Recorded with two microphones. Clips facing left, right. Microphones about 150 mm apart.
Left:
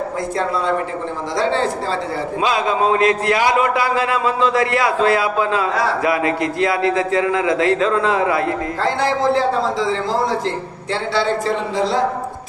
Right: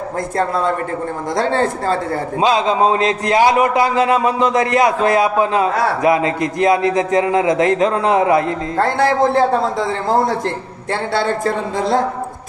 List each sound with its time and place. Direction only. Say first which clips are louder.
0.4 s a man's voice: right 2 dB; 45° right (ahead or behind)
2.4 s a man's voice: right 3 dB; 20° right (ahead or behind)
8.7 s a man's voice: right 7 dB; 55° right (ahead or behind)